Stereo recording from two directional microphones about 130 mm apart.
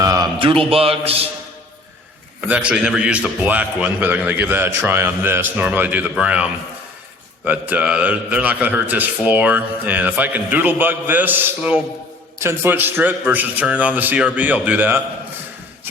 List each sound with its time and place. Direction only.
0.0 s a sound: 25° right (ahead or behind)
0.3 s a man's voice: 40° right (ahead or behind)
2.5 s a man's voice: 10° right (ahead or behind)